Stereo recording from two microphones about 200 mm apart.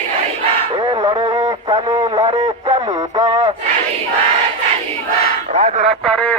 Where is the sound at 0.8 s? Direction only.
20° right (ahead or behind).